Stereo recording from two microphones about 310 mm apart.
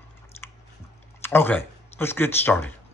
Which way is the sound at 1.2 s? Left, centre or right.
Centre.